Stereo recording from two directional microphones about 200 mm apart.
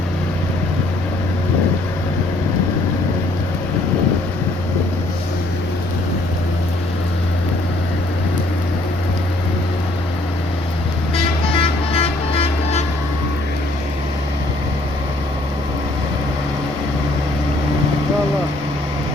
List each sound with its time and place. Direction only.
11.9 s vehicle: 30° left (ahead or behind)